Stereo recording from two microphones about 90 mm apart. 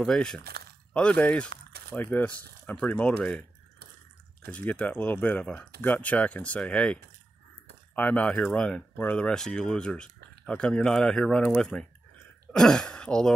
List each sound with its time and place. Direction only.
0.0 s speech: 5° left (ahead or behind)
4.5 s speech: 15° left (ahead or behind)